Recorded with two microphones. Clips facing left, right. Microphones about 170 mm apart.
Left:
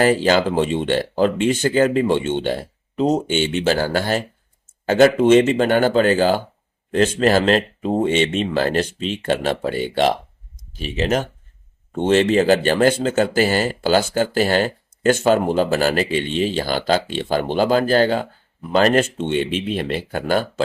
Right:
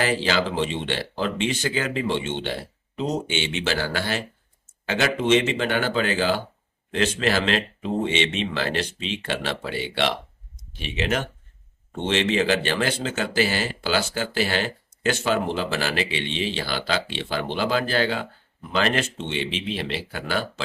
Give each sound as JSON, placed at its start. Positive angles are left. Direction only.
{"t": 0.0, "sound": "speech", "side_deg": 45}